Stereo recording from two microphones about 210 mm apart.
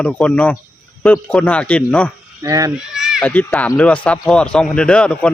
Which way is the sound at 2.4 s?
15° right (ahead or behind).